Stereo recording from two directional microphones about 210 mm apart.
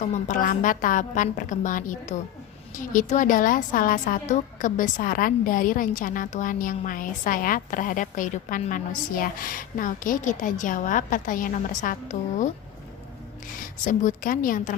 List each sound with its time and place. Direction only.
0.0 s a woman's voice: 35° left (ahead or behind)
13.6 s a woman's voice: 35° left (ahead or behind)